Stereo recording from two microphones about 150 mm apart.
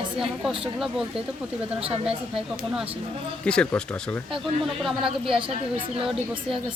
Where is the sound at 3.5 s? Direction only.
5° left (ahead or behind).